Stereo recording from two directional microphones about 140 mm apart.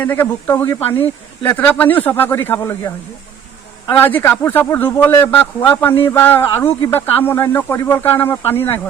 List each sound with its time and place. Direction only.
0.0 s speech: 15° left (ahead or behind)